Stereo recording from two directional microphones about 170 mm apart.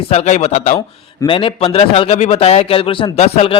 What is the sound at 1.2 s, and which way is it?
A man's voice, 30° left (ahead or behind).